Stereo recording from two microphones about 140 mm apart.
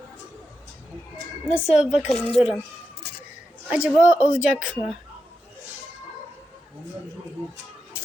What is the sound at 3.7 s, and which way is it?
A man's voice, 10° right (ahead or behind).